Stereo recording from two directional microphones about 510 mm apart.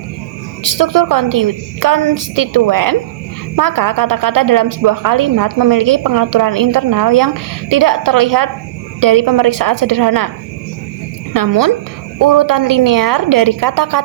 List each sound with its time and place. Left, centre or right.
0.6 s a woman's voice: right
11.3 s a woman's voice: right